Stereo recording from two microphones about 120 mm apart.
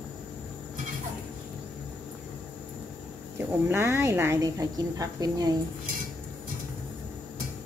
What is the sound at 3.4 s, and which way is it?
Speech, 20° right (ahead or behind).